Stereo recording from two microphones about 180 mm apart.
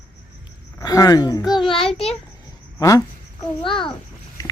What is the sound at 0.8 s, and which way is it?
Speech, 20° left (ahead or behind).